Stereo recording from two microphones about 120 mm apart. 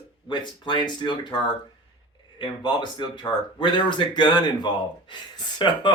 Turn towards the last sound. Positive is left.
turn(degrees=40)  # may be behind; listen again after turning